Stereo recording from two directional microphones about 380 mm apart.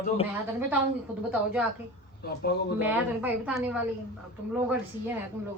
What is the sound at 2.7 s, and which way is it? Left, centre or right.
A woman's voice, centre.